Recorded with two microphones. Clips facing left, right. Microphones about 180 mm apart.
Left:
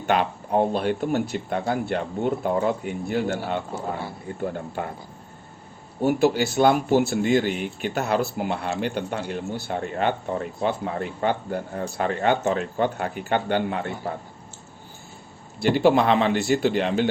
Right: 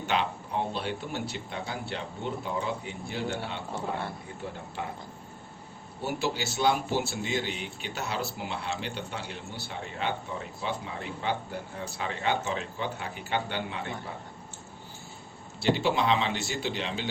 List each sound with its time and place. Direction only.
0.0 s speech: 55° left (ahead or behind)
6.0 s speech: 55° left (ahead or behind)
15.6 s speech: 55° left (ahead or behind)